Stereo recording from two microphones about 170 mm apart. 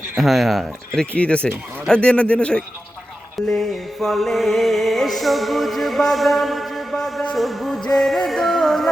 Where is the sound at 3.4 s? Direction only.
Centre (ahead or behind).